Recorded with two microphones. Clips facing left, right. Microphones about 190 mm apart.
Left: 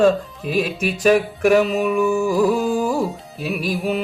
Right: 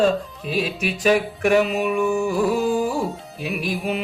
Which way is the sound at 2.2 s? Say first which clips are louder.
Left 2 dB; 40° left (ahead or behind).